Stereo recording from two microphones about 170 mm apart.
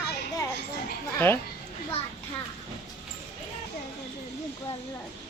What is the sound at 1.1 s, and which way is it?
Speech, 10° left (ahead or behind).